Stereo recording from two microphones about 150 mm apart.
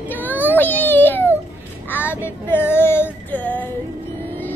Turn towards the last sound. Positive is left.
turn(degrees=10)  # may be behind; listen again after turning